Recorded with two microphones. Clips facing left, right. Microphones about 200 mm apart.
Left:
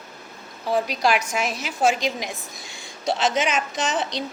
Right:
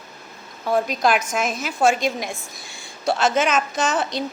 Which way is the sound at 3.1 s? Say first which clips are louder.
Right 3 dB; 50° right (ahead or behind).